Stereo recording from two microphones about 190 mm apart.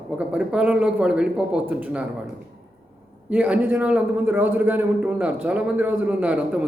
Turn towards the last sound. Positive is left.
turn(degrees=-5)  # may be behind; listen again after turning